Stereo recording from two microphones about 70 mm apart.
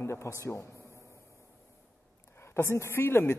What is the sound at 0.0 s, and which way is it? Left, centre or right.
Speech, left.